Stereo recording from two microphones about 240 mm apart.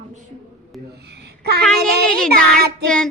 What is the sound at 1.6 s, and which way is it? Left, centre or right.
A child's voice, centre.